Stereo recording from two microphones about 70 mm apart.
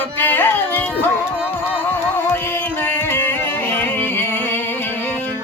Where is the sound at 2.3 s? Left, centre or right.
Left.